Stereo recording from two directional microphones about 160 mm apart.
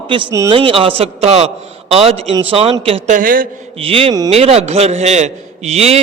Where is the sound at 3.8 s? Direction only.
35° right (ahead or behind).